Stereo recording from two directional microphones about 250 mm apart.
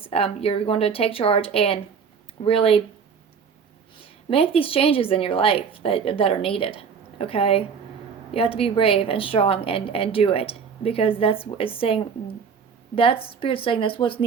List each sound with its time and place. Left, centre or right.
0.0 s a woman's voice: left
4.3 s a woman's voice: left